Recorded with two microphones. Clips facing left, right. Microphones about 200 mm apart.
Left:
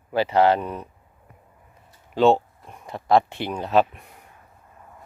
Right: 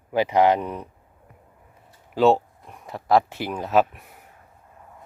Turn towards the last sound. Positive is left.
turn(degrees=-5)  # may be behind; listen again after turning